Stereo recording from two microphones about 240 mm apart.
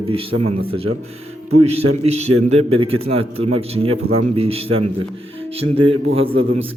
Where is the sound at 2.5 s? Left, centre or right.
Right.